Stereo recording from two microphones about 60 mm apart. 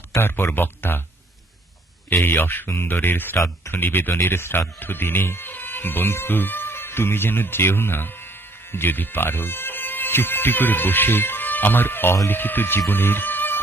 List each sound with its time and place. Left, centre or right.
0.2 s speech: left
2.0 s speech: left